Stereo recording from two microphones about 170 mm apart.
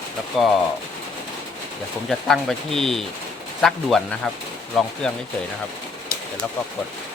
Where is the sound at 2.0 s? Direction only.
Centre (ahead or behind).